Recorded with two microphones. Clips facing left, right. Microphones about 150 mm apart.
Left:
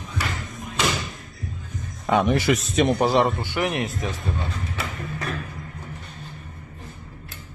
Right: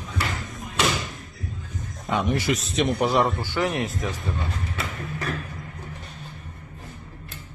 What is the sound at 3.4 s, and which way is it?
Speech, 20° left (ahead or behind).